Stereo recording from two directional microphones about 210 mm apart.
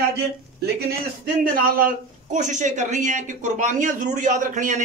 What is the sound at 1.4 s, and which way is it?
Speech, 40° right (ahead or behind).